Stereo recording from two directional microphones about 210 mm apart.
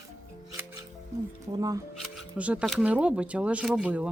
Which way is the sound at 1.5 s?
15° right (ahead or behind).